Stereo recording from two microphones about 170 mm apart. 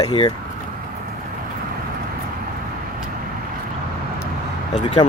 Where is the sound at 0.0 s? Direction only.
25° left (ahead or behind).